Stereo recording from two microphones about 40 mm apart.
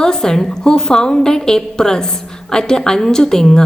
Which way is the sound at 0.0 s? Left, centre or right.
Centre.